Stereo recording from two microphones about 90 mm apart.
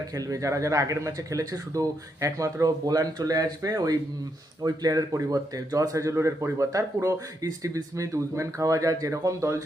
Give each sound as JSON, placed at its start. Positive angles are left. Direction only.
{"t": 0.1, "sound": "a man's voice", "side_deg": -40}